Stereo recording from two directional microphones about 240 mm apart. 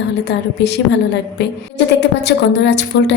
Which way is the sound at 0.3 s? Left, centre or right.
Left.